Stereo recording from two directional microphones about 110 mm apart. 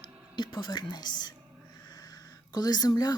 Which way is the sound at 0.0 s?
45° left (ahead or behind).